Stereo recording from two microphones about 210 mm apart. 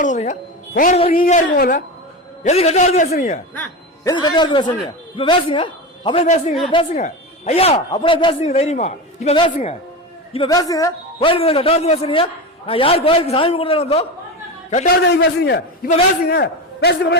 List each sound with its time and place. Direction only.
0.0 s speech: 35° left (ahead or behind)
2.4 s speech: 30° left (ahead or behind)
4.0 s a man's voice: 20° left (ahead or behind)
14.8 s a man's voice: 55° left (ahead or behind)